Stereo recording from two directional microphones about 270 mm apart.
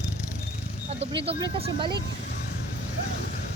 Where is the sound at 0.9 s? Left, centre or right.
Right.